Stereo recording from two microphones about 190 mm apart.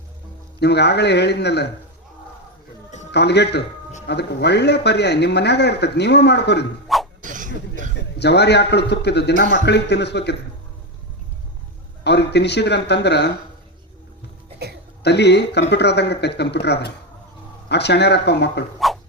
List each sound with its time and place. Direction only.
0.6 s speech: 60° left (ahead or behind)
3.1 s speech: 60° left (ahead or behind)
6.8 s beatboxing: centre (ahead or behind)
7.2 s a sound: 45° right (ahead or behind)
8.2 s speech: 60° left (ahead or behind)
12.0 s speech: 65° left (ahead or behind)
14.6 s a sound: 55° right (ahead or behind)
15.0 s speech: 60° left (ahead or behind)
18.8 s dog: centre (ahead or behind)